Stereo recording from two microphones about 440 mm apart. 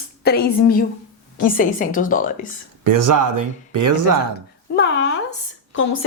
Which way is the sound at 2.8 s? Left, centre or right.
Right.